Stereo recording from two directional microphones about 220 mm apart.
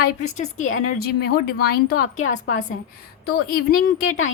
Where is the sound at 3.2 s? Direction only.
45° left (ahead or behind).